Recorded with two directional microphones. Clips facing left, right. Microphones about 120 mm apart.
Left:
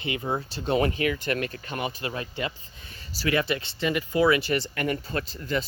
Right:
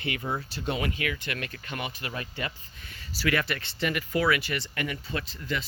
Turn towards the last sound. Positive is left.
turn(degrees=40)  # may be behind; listen again after turning